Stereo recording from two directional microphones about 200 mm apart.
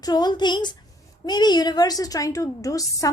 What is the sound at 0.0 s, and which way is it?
A woman's voice, 20° left (ahead or behind).